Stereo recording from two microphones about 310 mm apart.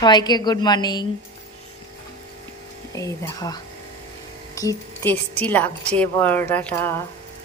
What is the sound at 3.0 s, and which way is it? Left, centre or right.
A woman's voice, centre.